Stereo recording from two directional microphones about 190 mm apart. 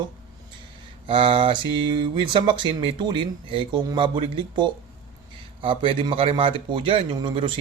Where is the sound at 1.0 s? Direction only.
30° right (ahead or behind).